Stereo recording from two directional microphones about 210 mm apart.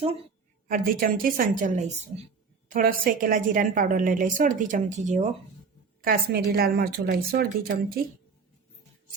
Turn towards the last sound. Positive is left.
turn(degrees=-45)  # may be behind; listen again after turning